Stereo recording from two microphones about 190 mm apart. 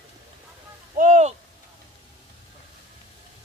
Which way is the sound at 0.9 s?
40° right (ahead or behind).